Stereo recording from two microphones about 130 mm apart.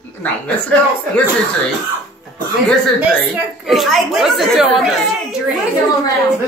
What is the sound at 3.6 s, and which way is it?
Speech, centre (ahead or behind).